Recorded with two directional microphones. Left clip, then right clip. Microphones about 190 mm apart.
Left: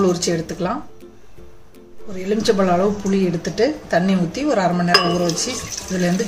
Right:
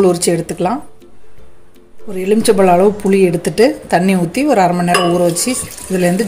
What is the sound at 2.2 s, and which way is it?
Speech, 40° right (ahead or behind).